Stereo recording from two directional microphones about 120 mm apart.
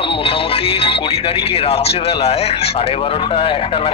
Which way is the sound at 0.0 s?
50° left (ahead or behind).